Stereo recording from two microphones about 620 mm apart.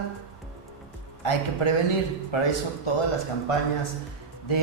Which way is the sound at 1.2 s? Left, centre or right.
Left.